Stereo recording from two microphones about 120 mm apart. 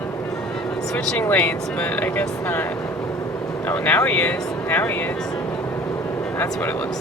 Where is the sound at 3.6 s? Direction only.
15° left (ahead or behind).